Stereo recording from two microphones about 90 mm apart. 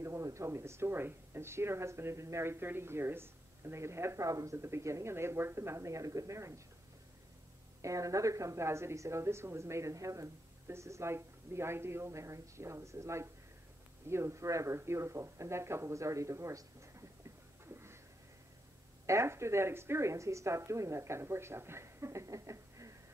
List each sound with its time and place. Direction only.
0.0 s speech: 35° right (ahead or behind)
7.8 s a woman's voice: 35° right (ahead or behind)
19.0 s a woman's voice: 30° right (ahead or behind)